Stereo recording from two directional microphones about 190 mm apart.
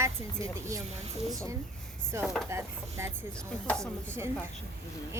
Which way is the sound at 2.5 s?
15° right (ahead or behind).